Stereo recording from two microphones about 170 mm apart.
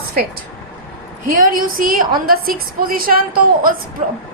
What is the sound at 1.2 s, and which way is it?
A woman's voice, 55° right (ahead or behind).